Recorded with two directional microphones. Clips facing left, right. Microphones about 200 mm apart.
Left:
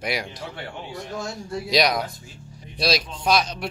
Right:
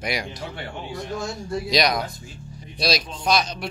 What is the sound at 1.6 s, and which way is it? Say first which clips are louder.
Speech: left 1 dB; 5° left (ahead or behind).